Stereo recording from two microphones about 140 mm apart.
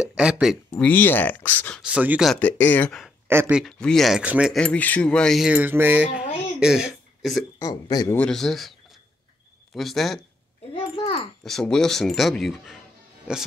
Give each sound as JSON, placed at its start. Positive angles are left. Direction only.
{"t": 0.0, "sound": "speech", "side_deg": -5}
{"t": 0.7, "sound": "speech", "side_deg": 10}
{"t": 1.8, "sound": "speech", "side_deg": -5}
{"t": 2.4, "sound": "speech", "side_deg": 15}
{"t": 3.3, "sound": "speech", "side_deg": -15}
{"t": 3.5, "sound": "speech", "side_deg": 0}
{"t": 4.6, "sound": "speech", "side_deg": 10}
{"t": 7.5, "sound": "speech", "side_deg": 25}
{"t": 8.2, "sound": "speech", "side_deg": 5}
{"t": 9.8, "sound": "speech", "side_deg": 0}
{"t": 10.7, "sound": "a sound", "side_deg": 40}
{"t": 11.4, "sound": "speech", "side_deg": 5}